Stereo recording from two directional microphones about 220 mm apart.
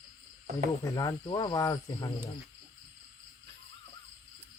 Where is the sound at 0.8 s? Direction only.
15° left (ahead or behind).